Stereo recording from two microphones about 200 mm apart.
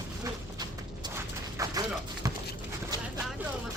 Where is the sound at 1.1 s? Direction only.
15° right (ahead or behind).